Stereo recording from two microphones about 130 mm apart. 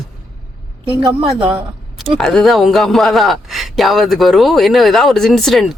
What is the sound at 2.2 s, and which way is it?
Speech, 5° left (ahead or behind).